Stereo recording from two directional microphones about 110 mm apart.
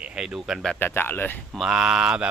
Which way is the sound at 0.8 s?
20° left (ahead or behind).